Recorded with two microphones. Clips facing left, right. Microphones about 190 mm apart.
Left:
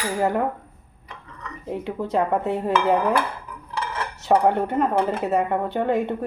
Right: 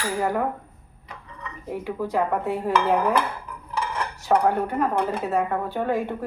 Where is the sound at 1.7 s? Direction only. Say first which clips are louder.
Left 2 dB; 25° left (ahead or behind).